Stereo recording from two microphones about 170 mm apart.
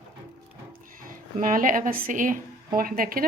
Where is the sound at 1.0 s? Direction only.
55° right (ahead or behind).